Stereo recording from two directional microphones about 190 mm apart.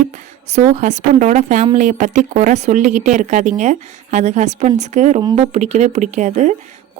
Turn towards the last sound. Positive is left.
turn(degrees=-40)  # may be behind; listen again after turning